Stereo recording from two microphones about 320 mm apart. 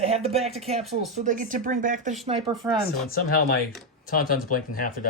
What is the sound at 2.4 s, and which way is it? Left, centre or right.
Speech, centre.